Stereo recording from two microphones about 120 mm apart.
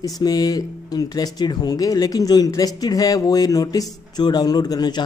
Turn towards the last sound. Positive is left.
turn(degrees=35)  # may be behind; listen again after turning